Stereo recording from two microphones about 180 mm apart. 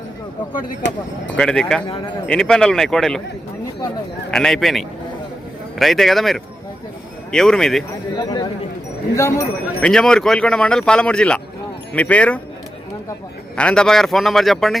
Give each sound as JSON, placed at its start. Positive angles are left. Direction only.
{"t": 0.8, "sound": "speech", "side_deg": 80}
{"t": 1.4, "sound": "speech", "side_deg": 5}
{"t": 4.3, "sound": "speech", "side_deg": 5}
{"t": 8.1, "sound": "speech", "side_deg": 20}
{"t": 9.8, "sound": "speech", "side_deg": 5}
{"t": 13.6, "sound": "speech", "side_deg": 5}